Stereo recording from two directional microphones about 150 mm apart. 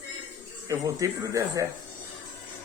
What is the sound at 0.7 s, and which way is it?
Speech, 20° right (ahead or behind).